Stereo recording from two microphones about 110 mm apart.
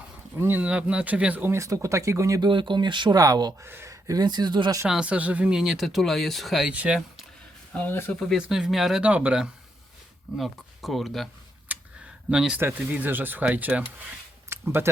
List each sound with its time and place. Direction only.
0.3 s speech: 20° right (ahead or behind)
2.5 s speech: 45° right (ahead or behind)
3.6 s speech: 25° right (ahead or behind); by 4.8 s 45° right (ahead or behind)
4.9 s speech: 10° right (ahead or behind)
7.7 s speech: 15° left (ahead or behind)
8.4 s speech: 5° right (ahead or behind)
11.7 s a sound: 15° right (ahead or behind)
12.3 s speech: 10° right (ahead or behind)
14.5 s a sound: 20° right (ahead or behind)